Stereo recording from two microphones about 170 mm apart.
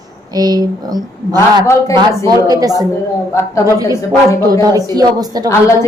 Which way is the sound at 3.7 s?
20° right (ahead or behind).